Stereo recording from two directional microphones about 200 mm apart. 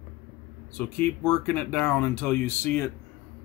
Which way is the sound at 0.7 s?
10° left (ahead or behind).